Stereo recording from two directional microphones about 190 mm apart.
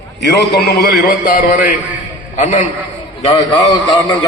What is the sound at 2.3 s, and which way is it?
Speech, 40° left (ahead or behind).